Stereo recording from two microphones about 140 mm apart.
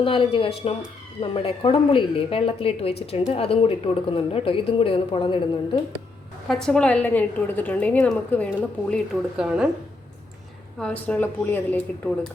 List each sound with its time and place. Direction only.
0.0 s a woman's voice: 40° left (ahead or behind)
6.5 s a woman's voice: 5° left (ahead or behind)
9.4 s a woman's voice: 5° right (ahead or behind)
10.8 s a woman's voice: 10° left (ahead or behind)